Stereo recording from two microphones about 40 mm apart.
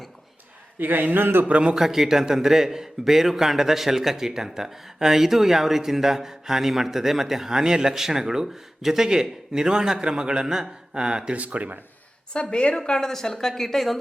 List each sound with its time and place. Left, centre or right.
0.8 s a man's voice: right
1.5 s speech: right
1.7 s speech: centre
10.4 s speech: centre
10.9 s speech: centre
11.3 s speech: right
12.3 s a woman's voice: left; by 14.0 s centre